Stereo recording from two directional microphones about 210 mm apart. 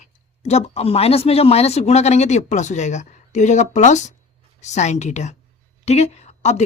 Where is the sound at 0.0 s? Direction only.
30° left (ahead or behind).